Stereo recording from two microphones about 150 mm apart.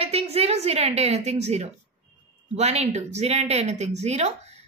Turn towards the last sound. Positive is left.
turn(degrees=-45)  # may be behind; listen again after turning